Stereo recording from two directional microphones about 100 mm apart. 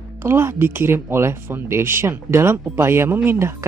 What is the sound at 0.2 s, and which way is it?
Speech, 25° right (ahead or behind).